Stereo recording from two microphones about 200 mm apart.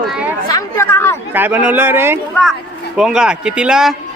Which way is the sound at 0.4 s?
15° left (ahead or behind).